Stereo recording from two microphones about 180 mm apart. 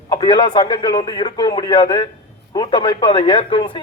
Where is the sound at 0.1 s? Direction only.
25° left (ahead or behind).